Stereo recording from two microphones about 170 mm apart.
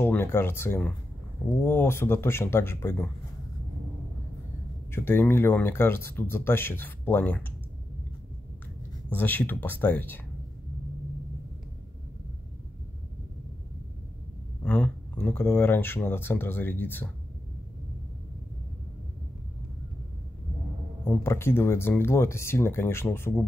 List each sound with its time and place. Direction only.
0.0 s speech: 15° left (ahead or behind)
4.9 s speech: 15° left (ahead or behind)
9.1 s speech: 10° left (ahead or behind)
14.6 s speech: 5° left (ahead or behind)
21.1 s speech: 15° left (ahead or behind)